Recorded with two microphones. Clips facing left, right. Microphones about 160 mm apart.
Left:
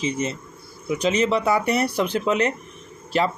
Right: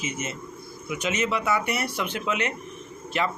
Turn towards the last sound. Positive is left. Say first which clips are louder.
# left 5 dB
turn(degrees=35)  # may be behind; listen again after turning